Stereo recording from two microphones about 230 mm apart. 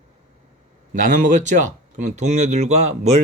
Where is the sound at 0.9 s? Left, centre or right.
Right.